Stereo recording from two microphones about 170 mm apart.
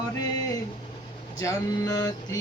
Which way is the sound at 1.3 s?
20° left (ahead or behind).